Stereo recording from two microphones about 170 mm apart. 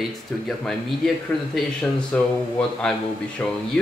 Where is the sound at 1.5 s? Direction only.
5° left (ahead or behind).